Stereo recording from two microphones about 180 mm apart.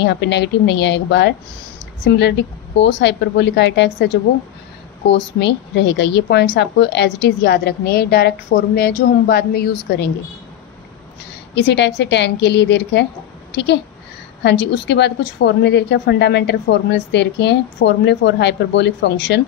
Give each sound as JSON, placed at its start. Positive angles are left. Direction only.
{"t": 0.0, "sound": "a woman's voice", "side_deg": 75}
{"t": 11.5, "sound": "a woman's voice", "side_deg": 70}
{"t": 13.5, "sound": "a sound", "side_deg": 75}
{"t": 14.4, "sound": "a woman's voice", "side_deg": 75}